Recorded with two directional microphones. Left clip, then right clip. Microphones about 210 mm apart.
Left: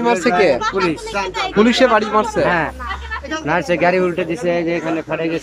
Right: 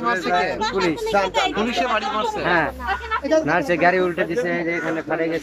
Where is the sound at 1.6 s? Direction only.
45° left (ahead or behind).